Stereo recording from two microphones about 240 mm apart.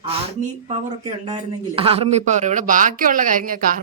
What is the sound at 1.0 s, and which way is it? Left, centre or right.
Speech, right.